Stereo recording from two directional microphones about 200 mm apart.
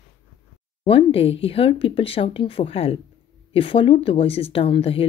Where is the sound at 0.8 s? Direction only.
25° left (ahead or behind).